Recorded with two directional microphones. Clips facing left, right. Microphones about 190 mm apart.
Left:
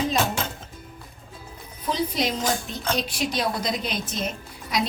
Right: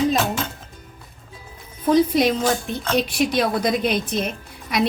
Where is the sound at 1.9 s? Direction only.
55° right (ahead or behind).